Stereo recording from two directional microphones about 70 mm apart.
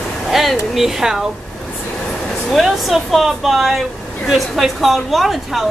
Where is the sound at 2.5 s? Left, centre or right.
Centre.